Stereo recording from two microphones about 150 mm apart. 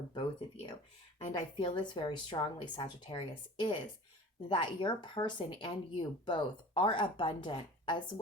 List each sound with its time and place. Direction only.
0.1 s speech: 30° left (ahead or behind)